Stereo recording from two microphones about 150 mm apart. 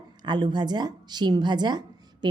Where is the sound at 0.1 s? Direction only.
30° right (ahead or behind).